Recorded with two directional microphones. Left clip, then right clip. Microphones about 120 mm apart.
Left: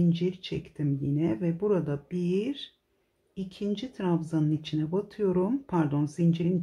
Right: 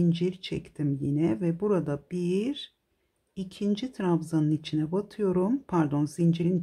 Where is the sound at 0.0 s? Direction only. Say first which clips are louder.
Right 1 dB; 25° right (ahead or behind).